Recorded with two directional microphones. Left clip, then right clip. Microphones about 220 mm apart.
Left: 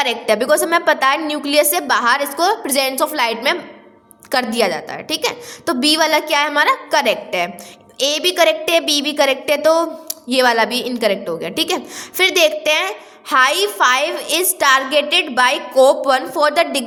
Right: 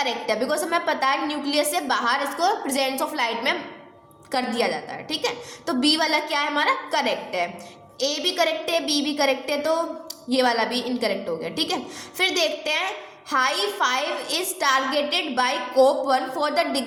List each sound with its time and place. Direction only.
0.0 s a woman's voice: 40° left (ahead or behind)